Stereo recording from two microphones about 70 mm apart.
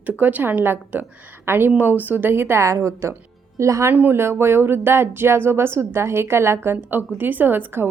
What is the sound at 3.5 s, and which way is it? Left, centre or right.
Speech, right.